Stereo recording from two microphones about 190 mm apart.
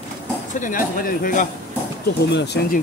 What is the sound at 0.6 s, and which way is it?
Speech, 45° left (ahead or behind).